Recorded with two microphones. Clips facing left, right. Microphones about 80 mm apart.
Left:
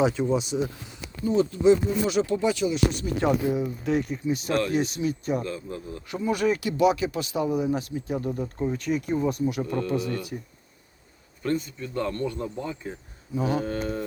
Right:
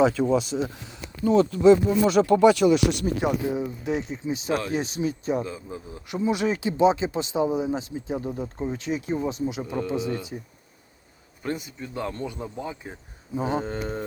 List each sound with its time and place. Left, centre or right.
0.0 s speech: right
0.3 s speech: right
1.2 s speech: right
3.6 s speech: centre
4.1 s speech: right
5.4 s speech: centre
11.4 s speech: centre